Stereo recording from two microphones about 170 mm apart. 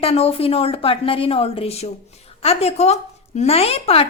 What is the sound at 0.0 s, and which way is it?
A woman's voice, 35° left (ahead or behind).